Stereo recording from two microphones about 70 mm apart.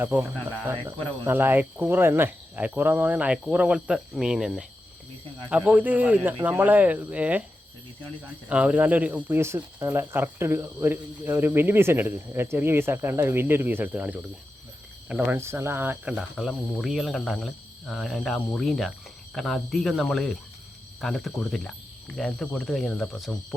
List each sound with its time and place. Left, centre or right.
0.0 s speech: right; by 4.6 s centre
5.5 s speech: right
8.4 s speech: centre
9.8 s speech: right
15.3 s speech: right
16.4 s speech: centre